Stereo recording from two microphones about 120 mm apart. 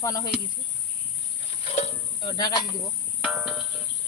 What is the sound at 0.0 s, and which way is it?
Speech, 30° left (ahead or behind).